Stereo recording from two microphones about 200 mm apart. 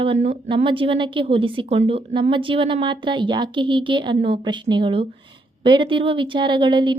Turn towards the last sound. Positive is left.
turn(degrees=-25)  # may be behind; listen again after turning